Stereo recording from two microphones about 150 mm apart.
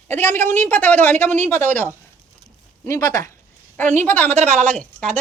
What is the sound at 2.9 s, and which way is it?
A woman's voice, 20° left (ahead or behind).